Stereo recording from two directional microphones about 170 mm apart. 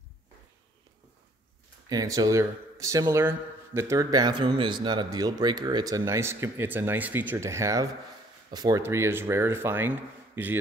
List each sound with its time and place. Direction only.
1.9 s speech: 20° right (ahead or behind)